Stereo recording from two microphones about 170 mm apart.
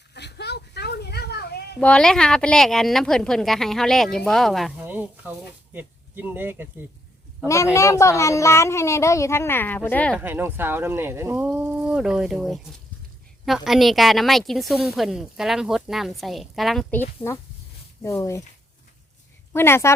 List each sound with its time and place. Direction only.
0.1 s a sound: 80° left
1.8 s a woman's voice: 5° left (ahead or behind)
4.9 s speech: 10° right (ahead or behind)
7.4 s a child's voice: 15° left (ahead or behind)
10.2 s a woman's voice: 10° right (ahead or behind)
18.0 s a child's voice: 15° left (ahead or behind)
19.5 s a child's voice: 15° left (ahead or behind)